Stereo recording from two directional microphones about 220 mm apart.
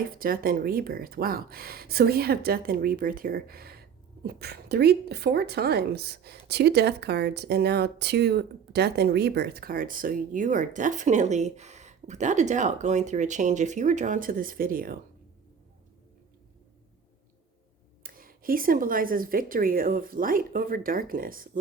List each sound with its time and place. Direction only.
0.1 s a woman's voice: 40° right (ahead or behind)
18.0 s a woman's voice: 40° right (ahead or behind)